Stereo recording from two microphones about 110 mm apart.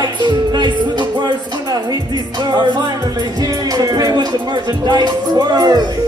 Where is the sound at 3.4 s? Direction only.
35° right (ahead or behind).